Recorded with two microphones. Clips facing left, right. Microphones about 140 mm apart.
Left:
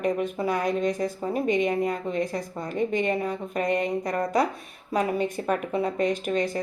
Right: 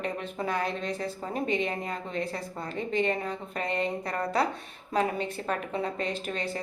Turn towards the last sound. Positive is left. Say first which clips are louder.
# left 7 dB
turn(degrees=15)  # may be behind; listen again after turning